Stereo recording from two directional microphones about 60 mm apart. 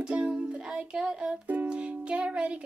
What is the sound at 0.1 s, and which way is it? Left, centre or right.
Music, centre.